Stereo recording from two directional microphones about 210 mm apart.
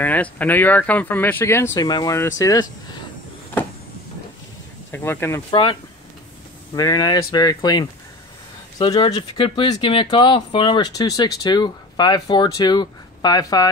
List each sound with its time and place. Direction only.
0.0 s speech: 5° left (ahead or behind)
4.9 s speech: 10° left (ahead or behind)
5.5 s speech: 25° left (ahead or behind)